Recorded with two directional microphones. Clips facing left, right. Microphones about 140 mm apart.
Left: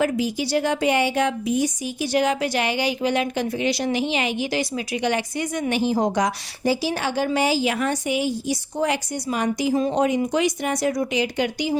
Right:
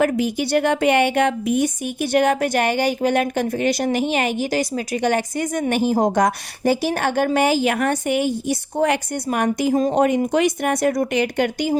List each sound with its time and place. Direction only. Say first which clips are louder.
0.0 s a woman's voice: right 3 dB; 55° right (ahead or behind)